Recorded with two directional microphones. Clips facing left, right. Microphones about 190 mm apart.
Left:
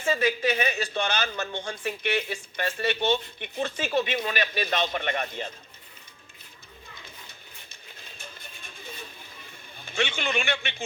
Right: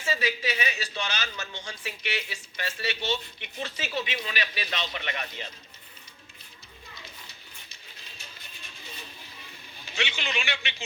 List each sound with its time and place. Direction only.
0.0 s speech: 50° left (ahead or behind)
8.2 s a sound: 50° left (ahead or behind)
9.7 s speech: 50° left (ahead or behind)